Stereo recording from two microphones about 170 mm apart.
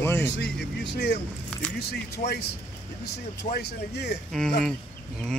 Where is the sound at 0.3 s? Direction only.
80° left.